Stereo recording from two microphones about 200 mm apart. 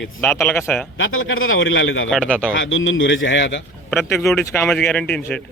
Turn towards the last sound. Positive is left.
turn(degrees=5)  # may be behind; listen again after turning